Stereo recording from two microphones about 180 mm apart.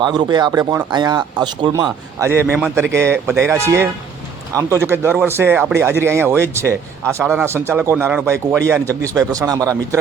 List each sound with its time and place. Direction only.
0.0 s a man's voice: 25° right (ahead or behind)